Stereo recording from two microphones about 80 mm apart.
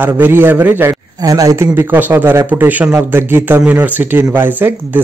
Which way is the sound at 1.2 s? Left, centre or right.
Right.